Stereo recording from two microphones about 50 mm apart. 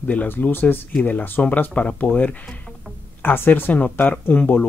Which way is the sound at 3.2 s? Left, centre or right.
Left.